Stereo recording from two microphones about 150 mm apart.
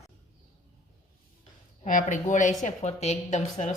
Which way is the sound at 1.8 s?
60° left (ahead or behind).